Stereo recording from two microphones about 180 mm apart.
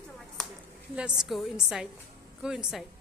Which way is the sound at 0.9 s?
5° right (ahead or behind).